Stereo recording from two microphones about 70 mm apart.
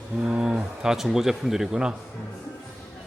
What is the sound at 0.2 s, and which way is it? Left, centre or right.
Speech, centre.